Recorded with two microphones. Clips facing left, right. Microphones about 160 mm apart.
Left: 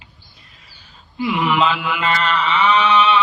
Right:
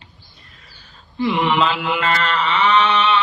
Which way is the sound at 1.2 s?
35° right (ahead or behind).